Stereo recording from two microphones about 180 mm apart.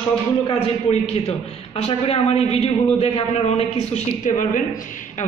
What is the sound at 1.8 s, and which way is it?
A man's voice, 35° left (ahead or behind).